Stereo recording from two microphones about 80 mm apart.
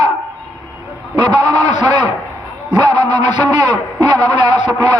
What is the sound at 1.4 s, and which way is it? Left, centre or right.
A man's voice, right.